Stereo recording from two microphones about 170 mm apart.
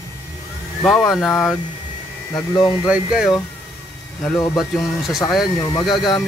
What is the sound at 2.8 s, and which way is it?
Speech, 5° right (ahead or behind).